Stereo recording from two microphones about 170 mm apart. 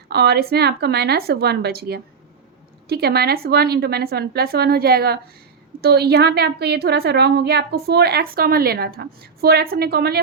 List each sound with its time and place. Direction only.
0.1 s a woman's voice: 70° right (ahead or behind)